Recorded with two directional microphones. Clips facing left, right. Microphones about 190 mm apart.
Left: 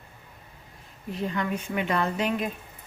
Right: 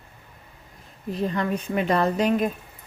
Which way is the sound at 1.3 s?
40° right (ahead or behind).